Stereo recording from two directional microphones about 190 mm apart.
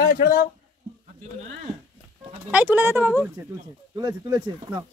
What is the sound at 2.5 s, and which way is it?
Speech, 10° right (ahead or behind).